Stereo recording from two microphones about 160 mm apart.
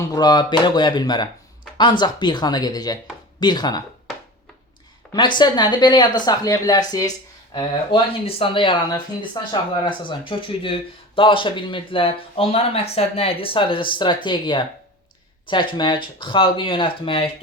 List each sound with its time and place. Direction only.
0.0 s speech: 25° left (ahead or behind)
5.1 s a man's voice: 30° left (ahead or behind)